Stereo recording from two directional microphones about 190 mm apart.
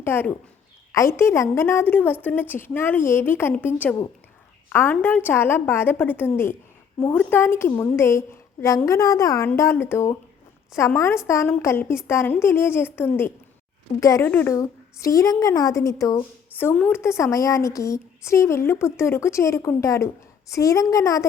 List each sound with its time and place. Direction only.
0.0 s a woman's voice: 10° left (ahead or behind)